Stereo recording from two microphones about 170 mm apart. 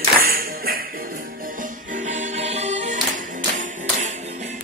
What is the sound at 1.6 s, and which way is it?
Music, 50° right (ahead or behind).